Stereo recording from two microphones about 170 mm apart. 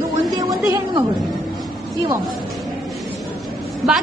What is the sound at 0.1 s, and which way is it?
Chatter, 20° right (ahead or behind).